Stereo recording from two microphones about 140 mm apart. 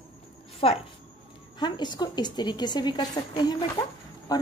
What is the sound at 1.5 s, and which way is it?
A woman's voice, 30° left (ahead or behind).